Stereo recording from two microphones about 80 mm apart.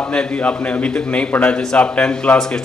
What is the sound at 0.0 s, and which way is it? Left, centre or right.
A man's voice, centre.